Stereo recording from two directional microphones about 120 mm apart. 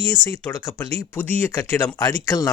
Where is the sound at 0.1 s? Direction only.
25° left (ahead or behind).